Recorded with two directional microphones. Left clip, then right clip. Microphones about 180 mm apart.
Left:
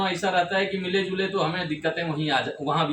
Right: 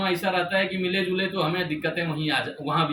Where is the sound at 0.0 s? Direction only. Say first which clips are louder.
Left 1 dB; 15° left (ahead or behind).